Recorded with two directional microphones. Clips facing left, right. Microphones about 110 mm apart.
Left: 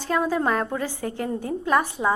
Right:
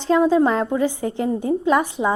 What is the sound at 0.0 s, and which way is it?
A woman's voice, 20° right (ahead or behind).